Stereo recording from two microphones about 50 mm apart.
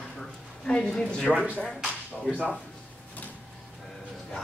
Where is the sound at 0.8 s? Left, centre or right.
Centre.